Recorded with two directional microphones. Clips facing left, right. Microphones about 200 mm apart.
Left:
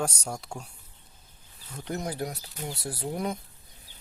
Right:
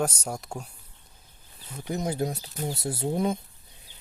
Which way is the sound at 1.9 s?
20° right (ahead or behind).